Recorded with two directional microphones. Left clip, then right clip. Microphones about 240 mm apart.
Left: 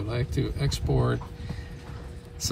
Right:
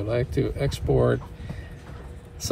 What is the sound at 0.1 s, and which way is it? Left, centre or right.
Speech, centre.